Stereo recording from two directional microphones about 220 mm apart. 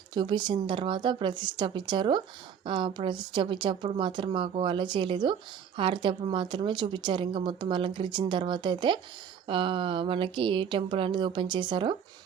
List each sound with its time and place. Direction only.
0.1 s a woman's voice: 20° right (ahead or behind)